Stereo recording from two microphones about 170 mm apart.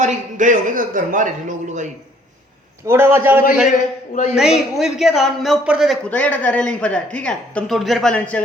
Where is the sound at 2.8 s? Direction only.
15° right (ahead or behind).